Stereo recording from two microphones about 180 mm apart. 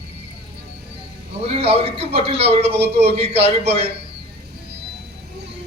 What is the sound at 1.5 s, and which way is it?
A man's voice, 35° right (ahead or behind).